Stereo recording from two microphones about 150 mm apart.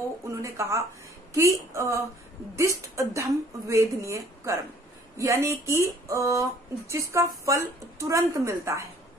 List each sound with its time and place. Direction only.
0.3 s a woman's voice: 20° right (ahead or behind)